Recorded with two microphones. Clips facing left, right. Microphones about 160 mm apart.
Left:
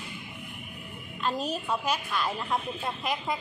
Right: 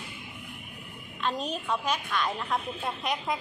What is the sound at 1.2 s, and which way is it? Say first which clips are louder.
A woman's voice: left 1 dB; 5° left (ahead or behind).